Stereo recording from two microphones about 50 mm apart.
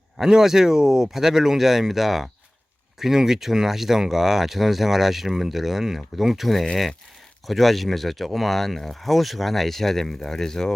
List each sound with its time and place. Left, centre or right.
0.2 s speech: centre